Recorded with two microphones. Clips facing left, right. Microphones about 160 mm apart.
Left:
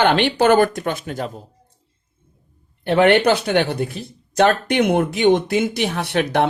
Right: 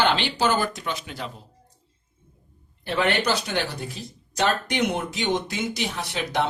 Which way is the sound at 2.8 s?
60° left (ahead or behind).